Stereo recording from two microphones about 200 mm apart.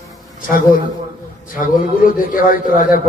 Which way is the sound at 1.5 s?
45° left (ahead or behind).